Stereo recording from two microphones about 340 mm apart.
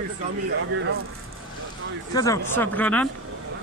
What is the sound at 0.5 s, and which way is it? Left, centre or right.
Speech, right.